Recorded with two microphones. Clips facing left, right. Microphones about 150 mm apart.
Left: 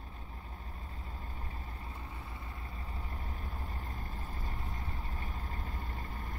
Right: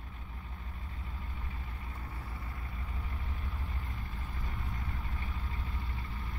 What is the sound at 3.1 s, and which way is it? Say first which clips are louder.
Vehicle: even; 40° left (ahead or behind).